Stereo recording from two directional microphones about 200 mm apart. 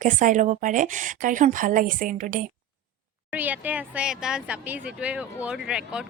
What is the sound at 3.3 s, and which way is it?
Speech, 10° right (ahead or behind).